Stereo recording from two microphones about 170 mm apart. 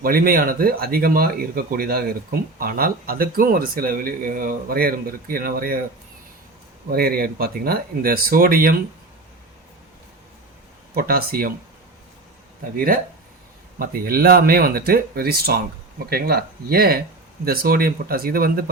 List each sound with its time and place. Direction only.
0.0 s speech: 60° right (ahead or behind)
6.9 s speech: 65° right (ahead or behind)
10.9 s speech: 60° right (ahead or behind)
12.7 s speech: 55° right (ahead or behind)